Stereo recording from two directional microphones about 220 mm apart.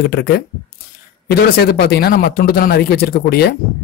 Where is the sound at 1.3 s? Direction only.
45° left (ahead or behind).